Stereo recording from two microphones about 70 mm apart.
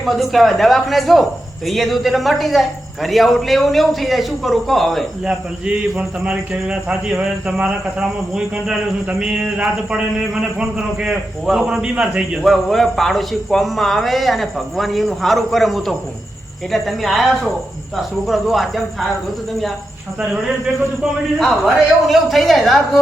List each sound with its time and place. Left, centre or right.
0.0 s speech: centre
5.2 s a man's voice: centre
12.4 s speech: centre
21.3 s speech: centre